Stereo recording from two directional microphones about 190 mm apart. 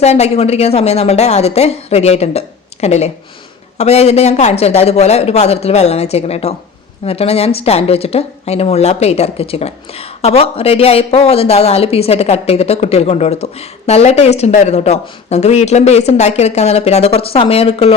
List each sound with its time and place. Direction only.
0.0 s speech: 35° left (ahead or behind)